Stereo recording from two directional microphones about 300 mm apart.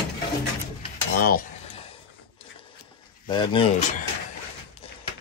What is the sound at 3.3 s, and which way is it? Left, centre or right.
Speech, centre.